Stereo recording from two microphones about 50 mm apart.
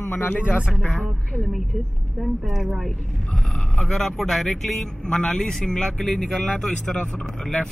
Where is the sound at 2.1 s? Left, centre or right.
Centre.